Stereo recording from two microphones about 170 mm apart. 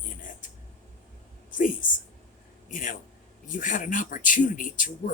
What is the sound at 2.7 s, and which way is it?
Speech, 50° left (ahead or behind).